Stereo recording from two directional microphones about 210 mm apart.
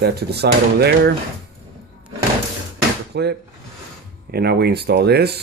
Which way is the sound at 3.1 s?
50° right (ahead or behind).